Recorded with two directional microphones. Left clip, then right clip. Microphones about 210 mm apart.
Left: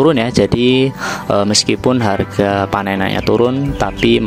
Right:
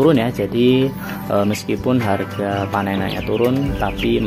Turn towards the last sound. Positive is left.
turn(degrees=30)  # may be behind; listen again after turning